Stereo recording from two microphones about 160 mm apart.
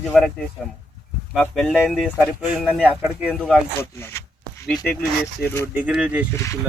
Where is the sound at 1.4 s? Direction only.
Centre (ahead or behind).